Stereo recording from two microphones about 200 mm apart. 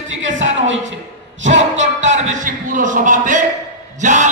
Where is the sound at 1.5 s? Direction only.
70° right (ahead or behind).